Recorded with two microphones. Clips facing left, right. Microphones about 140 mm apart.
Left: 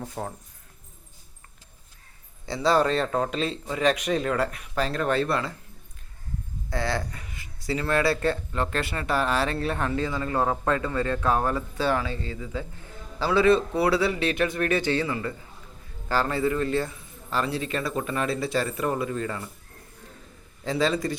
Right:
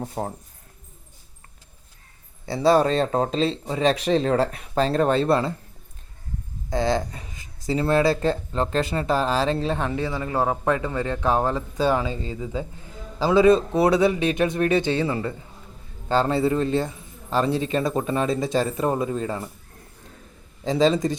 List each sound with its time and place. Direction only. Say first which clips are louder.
0.0 s speech: right 4 dB; 30° right (ahead or behind)
2.5 s speech: right 4 dB; 25° right (ahead or behind)
6.7 s a man's voice: right 6 dB; 20° right (ahead or behind)
20.7 s speech: right 5 dB; 20° right (ahead or behind)